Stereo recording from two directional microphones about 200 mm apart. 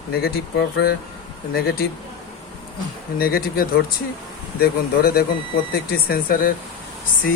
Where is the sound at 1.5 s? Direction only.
50° left (ahead or behind).